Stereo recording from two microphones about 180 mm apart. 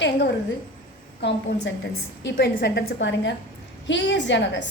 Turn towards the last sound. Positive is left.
turn(degrees=80)